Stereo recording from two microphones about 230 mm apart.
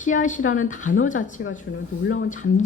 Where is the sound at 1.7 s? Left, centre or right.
Left.